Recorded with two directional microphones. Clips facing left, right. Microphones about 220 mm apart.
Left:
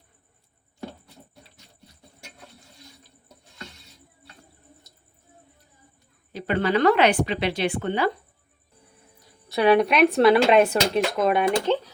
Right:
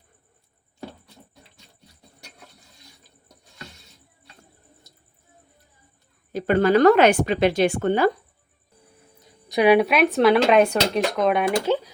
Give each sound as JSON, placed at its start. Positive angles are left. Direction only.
{"t": 6.3, "sound": "speech", "side_deg": -45}
{"t": 9.2, "sound": "speech", "side_deg": -15}